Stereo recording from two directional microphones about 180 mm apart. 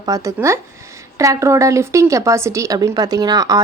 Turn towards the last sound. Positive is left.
turn(degrees=-20)  # may be behind; listen again after turning